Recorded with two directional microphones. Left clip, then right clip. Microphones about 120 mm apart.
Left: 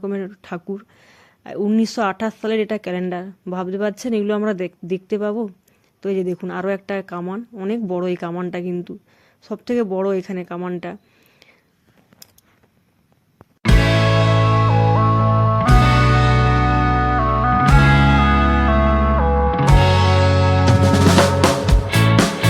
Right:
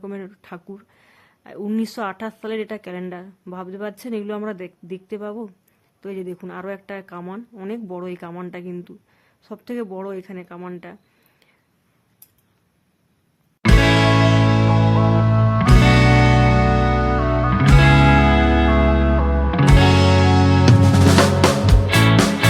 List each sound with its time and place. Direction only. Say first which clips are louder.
0.0 s speech: left 7 dB; 25° left (ahead or behind)
7.7 s speech: left 8 dB; 30° left (ahead or behind)
13.6 s music: right 2 dB; centre (ahead or behind)